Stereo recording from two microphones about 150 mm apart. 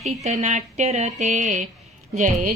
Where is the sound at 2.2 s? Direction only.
60° right (ahead or behind).